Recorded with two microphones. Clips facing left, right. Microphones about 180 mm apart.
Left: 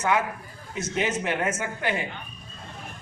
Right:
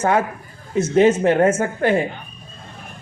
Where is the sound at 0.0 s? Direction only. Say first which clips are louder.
Right 6 dB; 50° right (ahead or behind).